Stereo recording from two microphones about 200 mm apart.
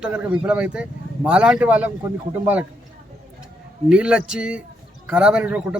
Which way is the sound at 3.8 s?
5° right (ahead or behind).